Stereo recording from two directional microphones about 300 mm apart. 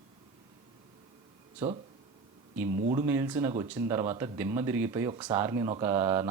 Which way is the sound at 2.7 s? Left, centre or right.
Right.